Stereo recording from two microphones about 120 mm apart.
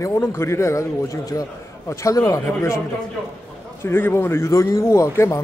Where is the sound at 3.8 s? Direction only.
20° left (ahead or behind).